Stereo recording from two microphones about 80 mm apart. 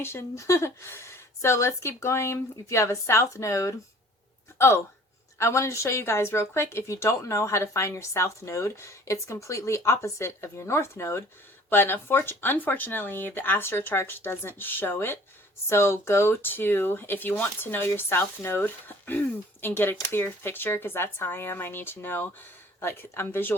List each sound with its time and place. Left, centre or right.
0.0 s a woman's voice: left